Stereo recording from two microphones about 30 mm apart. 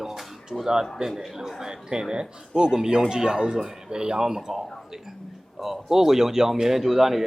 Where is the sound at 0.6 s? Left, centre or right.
Centre.